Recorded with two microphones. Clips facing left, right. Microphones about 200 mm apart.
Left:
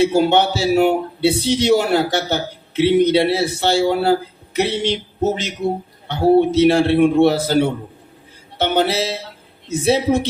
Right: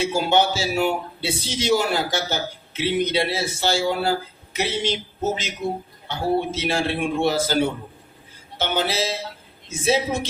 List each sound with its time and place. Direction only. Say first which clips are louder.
0.0 s a man's voice: left 5 dB; 65° left (ahead or behind)